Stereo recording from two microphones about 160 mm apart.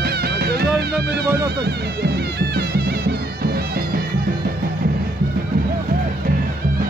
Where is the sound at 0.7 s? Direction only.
90° right.